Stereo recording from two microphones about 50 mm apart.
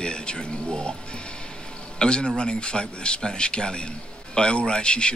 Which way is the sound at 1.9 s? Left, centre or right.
Centre.